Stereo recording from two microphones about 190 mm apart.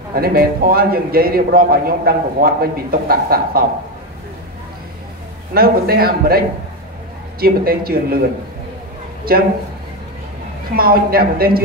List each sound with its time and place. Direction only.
0.1 s a man's voice: 50° right (ahead or behind)
5.5 s a man's voice: 55° right (ahead or behind)
9.3 s a man's voice: 50° right (ahead or behind)
10.7 s a man's voice: 50° right (ahead or behind)